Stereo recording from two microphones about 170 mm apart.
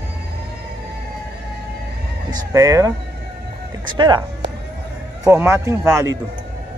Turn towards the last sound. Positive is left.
turn(degrees=-15)  # may be behind; listen again after turning